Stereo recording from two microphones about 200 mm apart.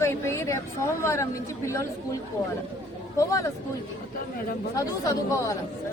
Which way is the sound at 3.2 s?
15° left (ahead or behind).